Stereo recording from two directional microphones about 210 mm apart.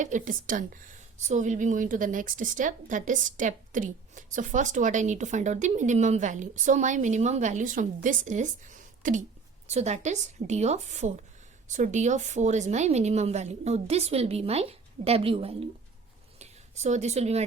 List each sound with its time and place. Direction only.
0.0 s a woman's voice: 35° right (ahead or behind)